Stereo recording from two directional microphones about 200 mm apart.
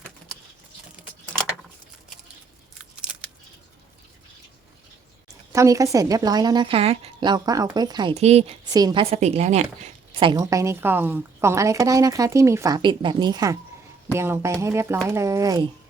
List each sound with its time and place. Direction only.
2.9 s scissors: 5° right (ahead or behind)
5.5 s a woman's voice: 15° right (ahead or behind)
8.1 s a woman's voice: 30° right (ahead or behind)
8.7 s a woman's voice: 20° right (ahead or behind)